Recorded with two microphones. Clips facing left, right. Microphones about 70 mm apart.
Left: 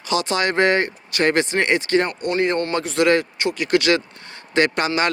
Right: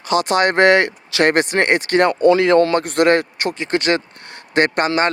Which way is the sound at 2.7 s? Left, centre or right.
Right.